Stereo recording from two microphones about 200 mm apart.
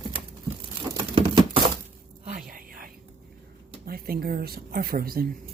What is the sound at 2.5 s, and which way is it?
Whispering, 45° right (ahead or behind).